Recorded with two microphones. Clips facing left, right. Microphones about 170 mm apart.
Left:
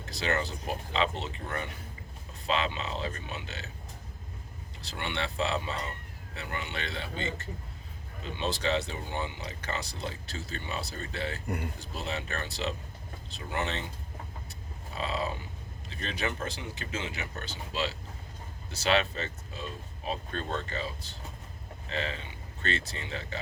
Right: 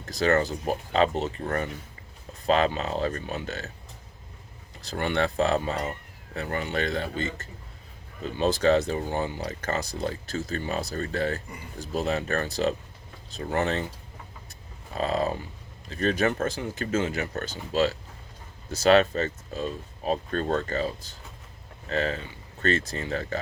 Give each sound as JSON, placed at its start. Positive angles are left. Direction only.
{"t": 0.0, "sound": "speech", "side_deg": -45}
{"t": 4.8, "sound": "speech", "side_deg": -45}
{"t": 11.4, "sound": "speech", "side_deg": 60}
{"t": 11.8, "sound": "speech", "side_deg": -45}
{"t": 14.9, "sound": "speech", "side_deg": -45}